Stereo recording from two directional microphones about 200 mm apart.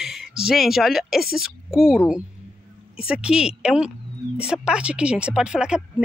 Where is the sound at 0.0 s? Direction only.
Centre (ahead or behind).